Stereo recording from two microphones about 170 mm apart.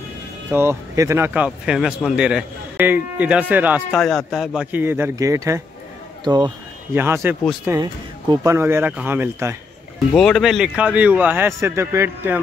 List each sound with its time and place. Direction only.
0.5 s speech: 15° right (ahead or behind)
3.9 s a man's voice: 5° left (ahead or behind)
4.6 s speech: 10° right (ahead or behind)
6.9 s speech: 15° right (ahead or behind)
10.1 s speech: centre (ahead or behind); by 12.4 s 15° right (ahead or behind)